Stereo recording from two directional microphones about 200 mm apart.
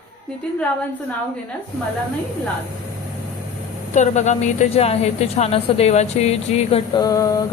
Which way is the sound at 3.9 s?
35° left (ahead or behind).